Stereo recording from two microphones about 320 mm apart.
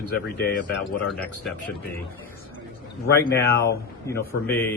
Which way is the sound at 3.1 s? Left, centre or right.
Centre.